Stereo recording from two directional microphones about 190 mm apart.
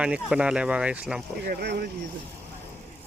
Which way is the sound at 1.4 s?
55° right (ahead or behind).